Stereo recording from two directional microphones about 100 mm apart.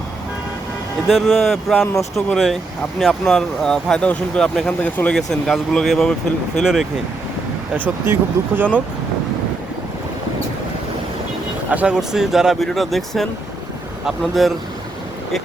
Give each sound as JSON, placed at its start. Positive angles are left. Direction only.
{"t": 1.0, "sound": "speech", "side_deg": -5}
{"t": 8.0, "sound": "speech", "side_deg": -25}
{"t": 11.7, "sound": "speech", "side_deg": -10}